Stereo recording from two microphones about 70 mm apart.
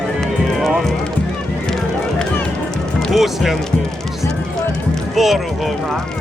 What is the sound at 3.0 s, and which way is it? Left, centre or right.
Speech, centre.